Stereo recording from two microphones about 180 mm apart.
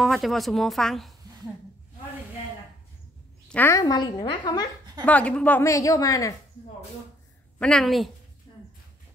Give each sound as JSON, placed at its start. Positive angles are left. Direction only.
{"t": 0.0, "sound": "speech", "side_deg": 0}
{"t": 3.4, "sound": "a woman's voice", "side_deg": 10}
{"t": 5.0, "sound": "a woman's voice", "side_deg": 5}
{"t": 7.5, "sound": "speech", "side_deg": 5}